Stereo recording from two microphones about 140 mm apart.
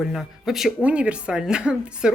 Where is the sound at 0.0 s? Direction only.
Centre (ahead or behind).